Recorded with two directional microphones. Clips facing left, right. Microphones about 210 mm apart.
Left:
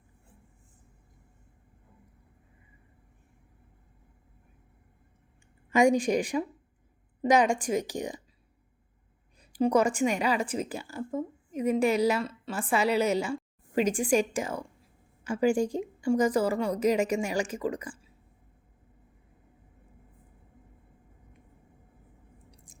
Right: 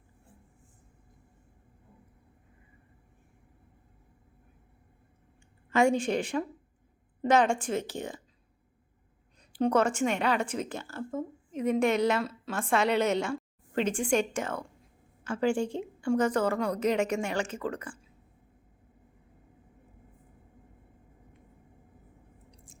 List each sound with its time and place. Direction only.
5.7 s a woman's voice: 15° left (ahead or behind)
9.4 s a woman's voice: 10° left (ahead or behind)
22.5 s chewing: 15° left (ahead or behind)